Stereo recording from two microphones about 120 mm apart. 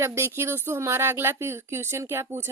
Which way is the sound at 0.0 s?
20° right (ahead or behind).